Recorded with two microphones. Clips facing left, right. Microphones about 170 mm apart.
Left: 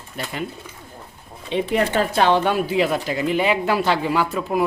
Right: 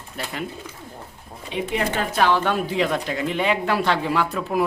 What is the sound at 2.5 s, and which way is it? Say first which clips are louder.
Speech: left 2 dB; 5° left (ahead or behind).